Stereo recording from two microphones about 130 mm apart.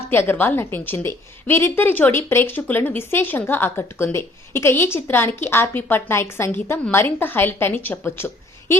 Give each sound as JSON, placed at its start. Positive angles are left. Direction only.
{"t": 0.1, "sound": "a woman's voice", "side_deg": 15}